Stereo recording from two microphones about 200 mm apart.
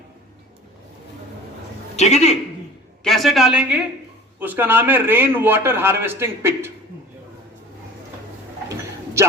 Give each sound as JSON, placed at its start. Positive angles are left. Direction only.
{"t": 2.0, "sound": "a man's voice", "side_deg": 35}
{"t": 3.0, "sound": "a man's voice", "side_deg": 0}